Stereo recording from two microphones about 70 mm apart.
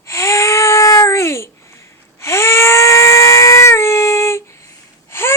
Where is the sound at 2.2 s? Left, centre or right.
Left.